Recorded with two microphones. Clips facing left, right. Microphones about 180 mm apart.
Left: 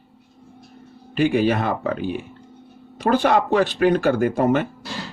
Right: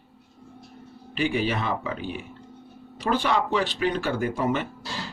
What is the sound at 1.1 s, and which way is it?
Speech, 45° left (ahead or behind).